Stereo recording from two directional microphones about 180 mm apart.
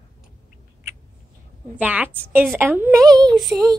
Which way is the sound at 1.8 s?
10° right (ahead or behind).